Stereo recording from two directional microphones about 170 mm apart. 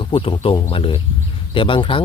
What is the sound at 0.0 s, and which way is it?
A man's voice, 30° left (ahead or behind).